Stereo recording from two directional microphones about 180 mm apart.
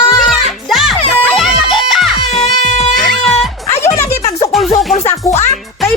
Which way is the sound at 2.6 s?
40° left (ahead or behind).